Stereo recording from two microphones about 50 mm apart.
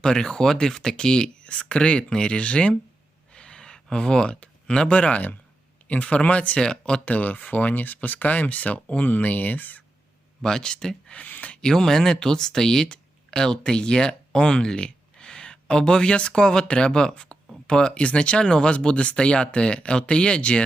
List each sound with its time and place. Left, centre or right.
0.0 s speech: centre
3.3 s a sound: centre
5.9 s speech: left
10.4 s speech: centre
11.1 s speech: left
11.5 s speech: centre